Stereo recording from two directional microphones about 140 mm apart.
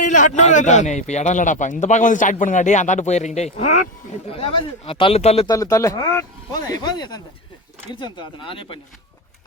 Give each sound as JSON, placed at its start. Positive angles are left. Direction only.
{"t": 0.0, "sound": "a man's voice", "side_deg": 60}
{"t": 5.5, "sound": "speech", "side_deg": 25}